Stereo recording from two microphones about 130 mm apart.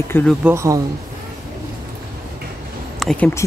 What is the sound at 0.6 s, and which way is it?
Speech, 25° right (ahead or behind).